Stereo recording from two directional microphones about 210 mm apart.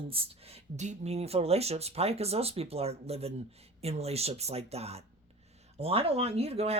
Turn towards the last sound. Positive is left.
turn(degrees=-30)  # may be behind; listen again after turning